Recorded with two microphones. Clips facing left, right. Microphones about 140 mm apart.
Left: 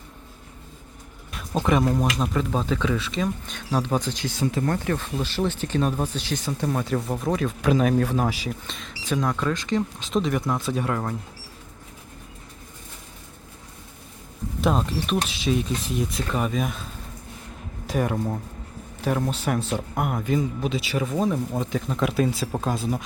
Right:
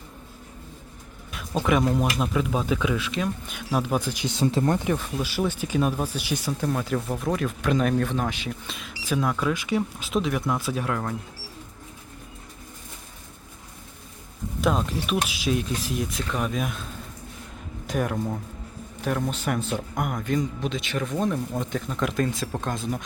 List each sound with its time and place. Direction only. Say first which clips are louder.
1.3 s speech: left 1 dB; centre (ahead or behind)
4.4 s speech: right 2 dB; 25° right (ahead or behind); by 11.1 s centre (ahead or behind)
14.6 s speech: left 1 dB; centre (ahead or behind)
17.8 s speech: left 2 dB; centre (ahead or behind)